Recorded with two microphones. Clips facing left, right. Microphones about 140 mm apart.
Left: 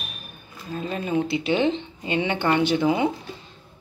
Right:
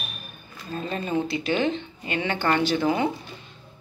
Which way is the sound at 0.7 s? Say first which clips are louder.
Left 1 dB; 5° left (ahead or behind).